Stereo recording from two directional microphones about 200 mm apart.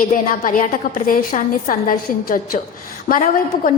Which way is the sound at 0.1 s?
40° left (ahead or behind).